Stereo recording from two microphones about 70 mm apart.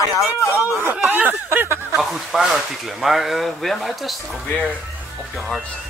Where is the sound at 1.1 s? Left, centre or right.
Right.